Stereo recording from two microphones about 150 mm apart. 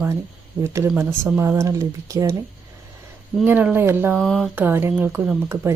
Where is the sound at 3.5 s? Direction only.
10° right (ahead or behind).